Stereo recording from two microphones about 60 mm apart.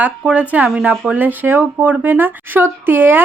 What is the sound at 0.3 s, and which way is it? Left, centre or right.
A woman's voice, right.